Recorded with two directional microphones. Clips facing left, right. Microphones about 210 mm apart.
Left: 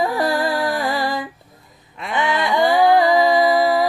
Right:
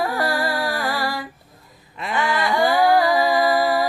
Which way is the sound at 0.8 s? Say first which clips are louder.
Left 3 dB; 20° left (ahead or behind).